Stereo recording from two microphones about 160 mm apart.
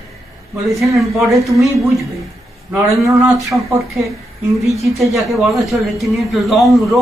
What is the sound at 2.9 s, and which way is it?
Speech, centre (ahead or behind).